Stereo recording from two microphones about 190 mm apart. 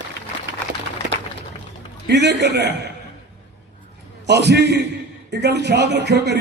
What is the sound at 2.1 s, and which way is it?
Speech, 65° right (ahead or behind).